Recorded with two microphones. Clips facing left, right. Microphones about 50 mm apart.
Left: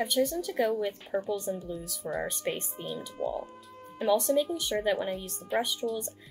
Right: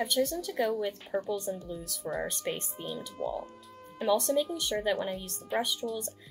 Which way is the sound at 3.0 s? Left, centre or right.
Centre.